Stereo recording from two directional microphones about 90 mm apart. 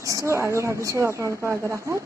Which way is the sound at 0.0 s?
35° right (ahead or behind).